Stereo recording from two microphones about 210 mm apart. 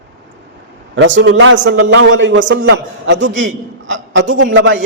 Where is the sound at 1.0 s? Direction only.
65° right (ahead or behind).